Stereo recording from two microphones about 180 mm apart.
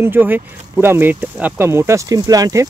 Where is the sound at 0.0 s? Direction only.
10° right (ahead or behind).